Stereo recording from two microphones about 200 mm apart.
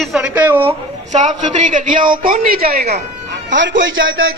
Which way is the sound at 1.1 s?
35° right (ahead or behind).